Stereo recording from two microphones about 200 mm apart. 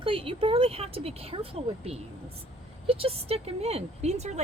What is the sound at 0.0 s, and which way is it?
A woman's voice, 25° right (ahead or behind).